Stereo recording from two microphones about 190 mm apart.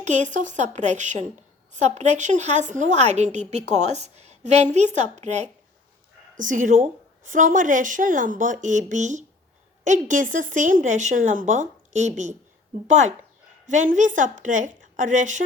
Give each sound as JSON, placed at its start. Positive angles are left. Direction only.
{"t": 0.0, "sound": "a woman's voice", "side_deg": -40}